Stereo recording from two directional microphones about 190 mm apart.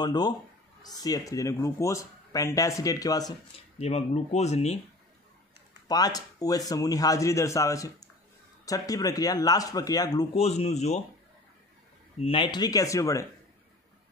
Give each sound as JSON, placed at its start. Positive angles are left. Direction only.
{"t": 0.0, "sound": "a man's voice", "side_deg": 20}
{"t": 3.8, "sound": "speech", "side_deg": 35}
{"t": 5.9, "sound": "a man's voice", "side_deg": 20}
{"t": 10.3, "sound": "speech", "side_deg": 35}
{"t": 12.2, "sound": "a man's voice", "side_deg": 30}